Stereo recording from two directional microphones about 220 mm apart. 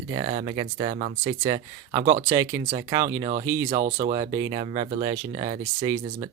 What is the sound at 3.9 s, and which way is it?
Speech, 25° right (ahead or behind).